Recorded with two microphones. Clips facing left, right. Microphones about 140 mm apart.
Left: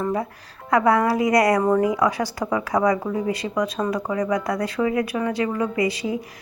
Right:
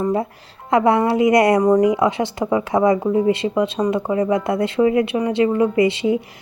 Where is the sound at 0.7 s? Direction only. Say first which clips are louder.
Right 3 dB; 25° right (ahead or behind).